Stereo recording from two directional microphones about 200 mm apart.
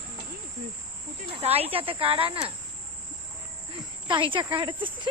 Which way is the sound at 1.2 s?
30° right (ahead or behind).